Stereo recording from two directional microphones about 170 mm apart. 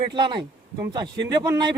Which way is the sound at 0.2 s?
30° right (ahead or behind).